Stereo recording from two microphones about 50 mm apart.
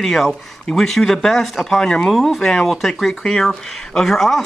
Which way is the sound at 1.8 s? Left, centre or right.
Centre.